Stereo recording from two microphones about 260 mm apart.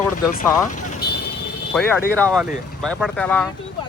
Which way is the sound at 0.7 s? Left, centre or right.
Left.